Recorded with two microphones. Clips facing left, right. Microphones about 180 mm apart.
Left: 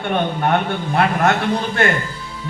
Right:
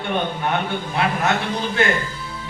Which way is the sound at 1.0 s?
55° left (ahead or behind).